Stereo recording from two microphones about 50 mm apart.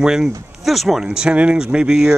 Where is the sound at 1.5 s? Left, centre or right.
Centre.